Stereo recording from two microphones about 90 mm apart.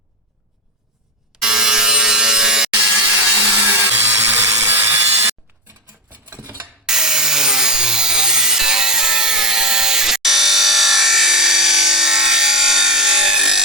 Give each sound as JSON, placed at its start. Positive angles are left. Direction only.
{"t": 1.4, "sound": "a sound", "side_deg": -5}
{"t": 2.9, "sound": "sawing", "side_deg": -20}
{"t": 6.1, "sound": "cutlery", "side_deg": -20}
{"t": 6.8, "sound": "wood", "side_deg": -5}